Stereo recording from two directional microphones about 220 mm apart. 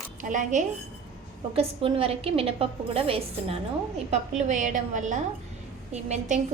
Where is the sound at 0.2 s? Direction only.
35° right (ahead or behind).